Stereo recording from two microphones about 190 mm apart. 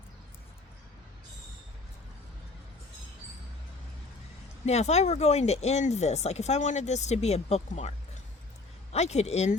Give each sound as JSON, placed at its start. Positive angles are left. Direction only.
{"t": 4.6, "sound": "speech", "side_deg": 35}